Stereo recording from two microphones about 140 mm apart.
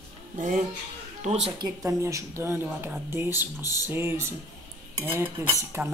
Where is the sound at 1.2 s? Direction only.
50° right (ahead or behind).